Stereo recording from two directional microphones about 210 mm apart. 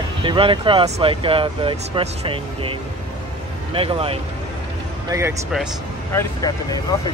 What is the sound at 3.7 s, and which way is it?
Speech, 25° right (ahead or behind).